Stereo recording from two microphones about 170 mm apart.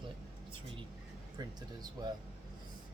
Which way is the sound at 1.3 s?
25° right (ahead or behind).